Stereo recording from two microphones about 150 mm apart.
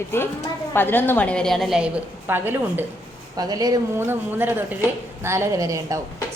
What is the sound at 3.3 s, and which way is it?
A woman's voice, 25° right (ahead or behind).